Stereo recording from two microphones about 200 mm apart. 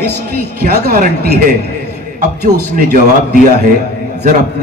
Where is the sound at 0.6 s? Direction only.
50° right (ahead or behind).